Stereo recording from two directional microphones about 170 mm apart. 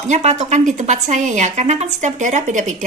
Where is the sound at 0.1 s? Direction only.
45° right (ahead or behind).